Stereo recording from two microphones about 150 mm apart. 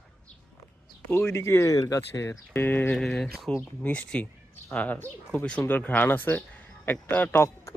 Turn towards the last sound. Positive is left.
turn(degrees=15)  # may be behind; listen again after turning